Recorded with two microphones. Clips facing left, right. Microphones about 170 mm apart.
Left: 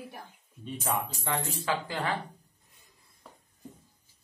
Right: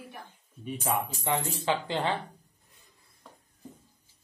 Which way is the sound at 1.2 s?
20° right (ahead or behind).